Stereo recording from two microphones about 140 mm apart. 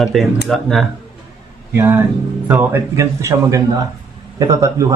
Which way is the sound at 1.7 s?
15° right (ahead or behind).